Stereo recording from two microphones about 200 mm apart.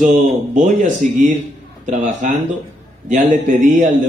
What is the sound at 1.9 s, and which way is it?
A man's voice, 40° right (ahead or behind).